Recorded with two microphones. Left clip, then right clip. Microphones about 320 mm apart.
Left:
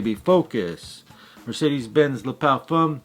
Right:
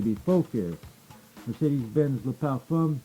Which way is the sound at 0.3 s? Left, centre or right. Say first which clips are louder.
Left 8 dB; centre.